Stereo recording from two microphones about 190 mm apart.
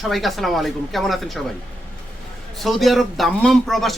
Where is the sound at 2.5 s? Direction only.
Centre (ahead or behind).